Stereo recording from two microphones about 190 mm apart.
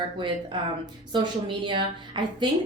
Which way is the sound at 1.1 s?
25° right (ahead or behind).